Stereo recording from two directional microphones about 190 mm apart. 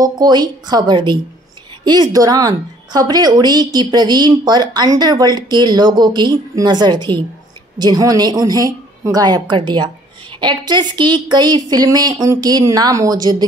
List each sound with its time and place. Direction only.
0.0 s a woman's voice: 20° right (ahead or behind)